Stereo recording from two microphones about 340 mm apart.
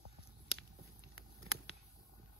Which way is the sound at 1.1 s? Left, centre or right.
Left.